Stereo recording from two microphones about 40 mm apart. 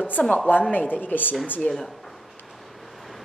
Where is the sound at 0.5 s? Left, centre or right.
Left.